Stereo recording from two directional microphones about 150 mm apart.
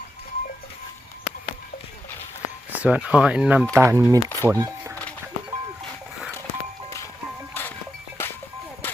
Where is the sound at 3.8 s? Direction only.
20° right (ahead or behind).